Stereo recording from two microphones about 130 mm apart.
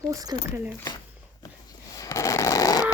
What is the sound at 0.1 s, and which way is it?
Speech, 30° right (ahead or behind).